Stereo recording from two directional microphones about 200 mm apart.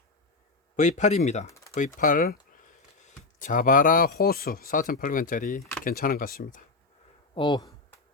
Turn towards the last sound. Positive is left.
turn(degrees=25)  # may be behind; listen again after turning